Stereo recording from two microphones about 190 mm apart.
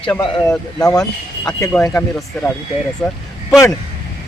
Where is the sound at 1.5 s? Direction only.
15° left (ahead or behind).